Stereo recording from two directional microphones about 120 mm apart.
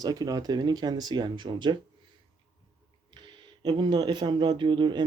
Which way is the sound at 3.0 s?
40° right (ahead or behind).